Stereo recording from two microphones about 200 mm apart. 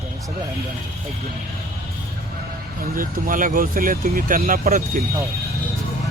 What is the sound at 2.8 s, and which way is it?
Speech, 45° right (ahead or behind).